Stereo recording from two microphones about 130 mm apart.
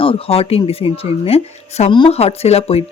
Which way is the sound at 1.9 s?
40° left (ahead or behind).